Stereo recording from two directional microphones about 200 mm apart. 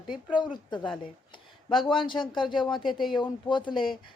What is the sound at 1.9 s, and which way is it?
Speech, 25° left (ahead or behind).